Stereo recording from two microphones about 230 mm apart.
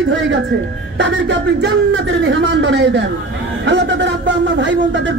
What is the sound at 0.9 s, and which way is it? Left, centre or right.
Speech, right.